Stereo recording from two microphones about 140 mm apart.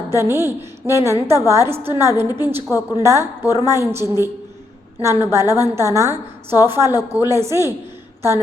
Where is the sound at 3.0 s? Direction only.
20° right (ahead or behind).